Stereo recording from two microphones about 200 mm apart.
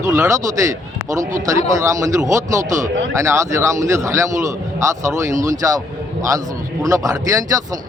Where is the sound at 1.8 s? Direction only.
15° right (ahead or behind).